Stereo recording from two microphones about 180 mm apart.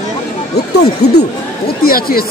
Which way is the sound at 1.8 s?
55° left (ahead or behind).